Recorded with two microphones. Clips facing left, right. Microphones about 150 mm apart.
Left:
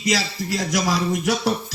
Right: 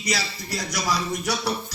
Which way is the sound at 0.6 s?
45° left (ahead or behind).